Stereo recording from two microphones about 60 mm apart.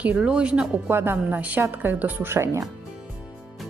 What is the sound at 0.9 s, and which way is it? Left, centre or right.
A woman's voice, right.